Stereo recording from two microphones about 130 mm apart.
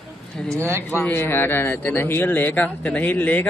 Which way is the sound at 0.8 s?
15° left (ahead or behind).